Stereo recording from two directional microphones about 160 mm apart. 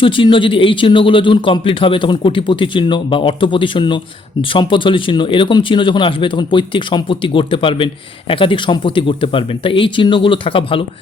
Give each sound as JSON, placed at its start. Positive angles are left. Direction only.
{"t": 0.0, "sound": "a man's voice", "side_deg": 30}